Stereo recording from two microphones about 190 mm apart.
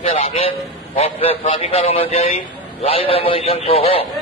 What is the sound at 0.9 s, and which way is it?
A man's voice, 30° left (ahead or behind).